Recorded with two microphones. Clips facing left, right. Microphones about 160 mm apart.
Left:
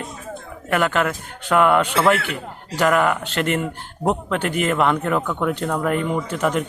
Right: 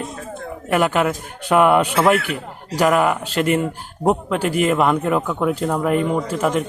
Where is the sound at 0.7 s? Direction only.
10° right (ahead or behind).